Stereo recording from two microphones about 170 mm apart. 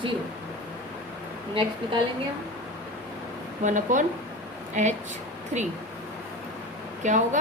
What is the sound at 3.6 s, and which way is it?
Speech, 50° right (ahead or behind).